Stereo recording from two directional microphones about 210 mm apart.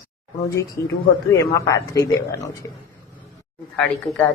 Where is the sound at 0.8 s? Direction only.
15° left (ahead or behind).